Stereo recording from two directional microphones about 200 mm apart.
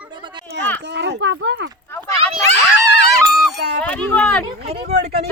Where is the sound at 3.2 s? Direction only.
Centre (ahead or behind).